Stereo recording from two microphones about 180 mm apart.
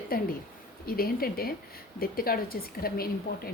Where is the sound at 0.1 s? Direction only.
55° left (ahead or behind).